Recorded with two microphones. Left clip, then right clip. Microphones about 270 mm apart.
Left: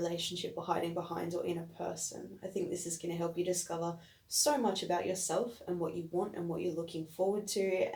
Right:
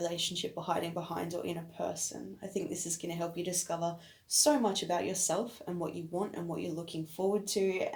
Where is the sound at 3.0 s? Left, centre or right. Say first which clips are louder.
Left 1 dB; right.